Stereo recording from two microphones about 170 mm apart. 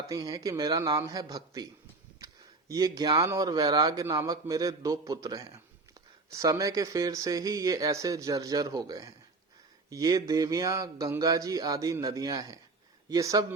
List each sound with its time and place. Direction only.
0.1 s speech: 20° right (ahead or behind)